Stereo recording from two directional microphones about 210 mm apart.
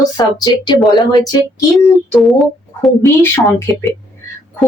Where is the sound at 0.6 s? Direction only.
20° left (ahead or behind).